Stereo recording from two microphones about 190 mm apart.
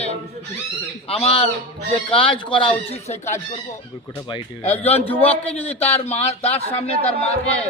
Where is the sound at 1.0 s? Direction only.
30° left (ahead or behind).